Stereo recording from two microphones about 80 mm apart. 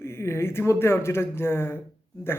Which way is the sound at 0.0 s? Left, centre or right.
Left.